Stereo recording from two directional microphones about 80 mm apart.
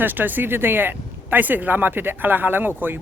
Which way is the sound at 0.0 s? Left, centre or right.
Right.